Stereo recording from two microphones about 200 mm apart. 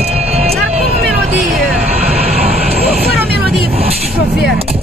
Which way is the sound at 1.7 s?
30° right (ahead or behind).